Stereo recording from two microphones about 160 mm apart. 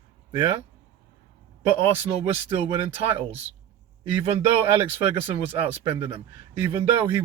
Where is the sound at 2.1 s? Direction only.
35° right (ahead or behind).